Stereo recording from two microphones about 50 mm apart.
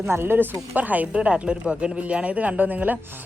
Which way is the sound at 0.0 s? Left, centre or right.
Right.